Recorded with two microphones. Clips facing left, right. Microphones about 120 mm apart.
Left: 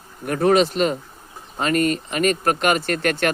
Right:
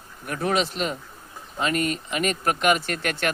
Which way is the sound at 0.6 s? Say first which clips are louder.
Left 7 dB; 50° left (ahead or behind).